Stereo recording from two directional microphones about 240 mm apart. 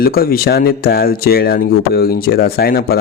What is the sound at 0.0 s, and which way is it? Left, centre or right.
Speech, left.